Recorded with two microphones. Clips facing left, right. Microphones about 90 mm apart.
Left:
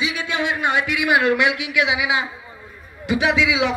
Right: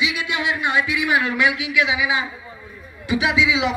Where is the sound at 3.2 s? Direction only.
40° left (ahead or behind).